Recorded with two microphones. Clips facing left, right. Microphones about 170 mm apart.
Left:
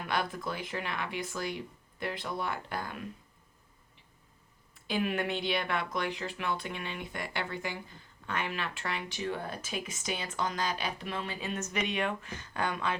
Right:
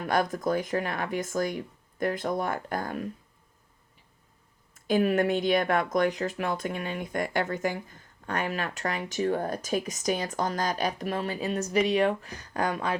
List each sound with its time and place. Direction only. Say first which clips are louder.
0.0 s speech: right 7 dB; 45° right (ahead or behind)
4.7 s speech: right 8 dB; 45° right (ahead or behind)